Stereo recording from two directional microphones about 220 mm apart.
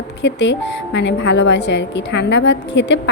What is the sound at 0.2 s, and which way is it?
Speech, 55° left (ahead or behind).